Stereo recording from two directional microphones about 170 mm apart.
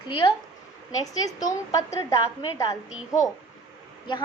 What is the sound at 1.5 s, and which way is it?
A woman's voice, 20° left (ahead or behind).